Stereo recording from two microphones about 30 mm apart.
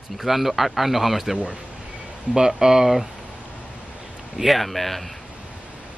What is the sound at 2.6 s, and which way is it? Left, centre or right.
Speech, centre.